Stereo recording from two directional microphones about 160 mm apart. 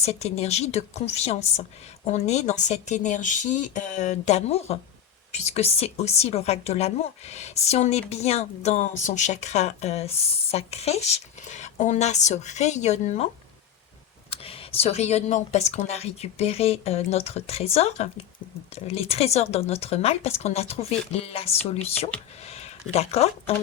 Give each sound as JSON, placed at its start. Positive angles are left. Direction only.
{"t": 0.0, "sound": "a woman's voice", "side_deg": 45}
{"t": 14.3, "sound": "speech", "side_deg": 35}